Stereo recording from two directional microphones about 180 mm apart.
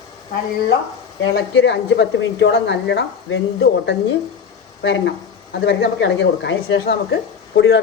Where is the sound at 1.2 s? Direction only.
90° left.